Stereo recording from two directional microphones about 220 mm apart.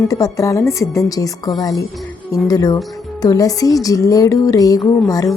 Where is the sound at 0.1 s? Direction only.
15° left (ahead or behind).